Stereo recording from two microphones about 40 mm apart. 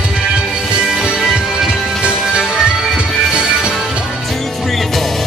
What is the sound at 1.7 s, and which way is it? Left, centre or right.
Music, right.